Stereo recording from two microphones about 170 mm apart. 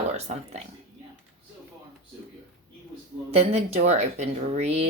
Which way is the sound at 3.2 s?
35° right (ahead or behind).